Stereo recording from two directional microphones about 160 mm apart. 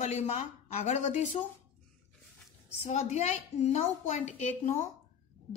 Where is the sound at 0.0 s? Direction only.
45° left (ahead or behind).